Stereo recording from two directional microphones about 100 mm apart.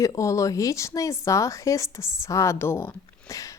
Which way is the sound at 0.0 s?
30° left (ahead or behind).